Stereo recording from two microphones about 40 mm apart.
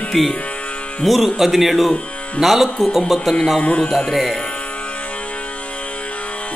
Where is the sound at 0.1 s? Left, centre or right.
Centre.